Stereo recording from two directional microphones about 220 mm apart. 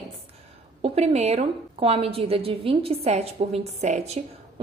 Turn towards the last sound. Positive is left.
turn(degrees=-30)  # may be behind; listen again after turning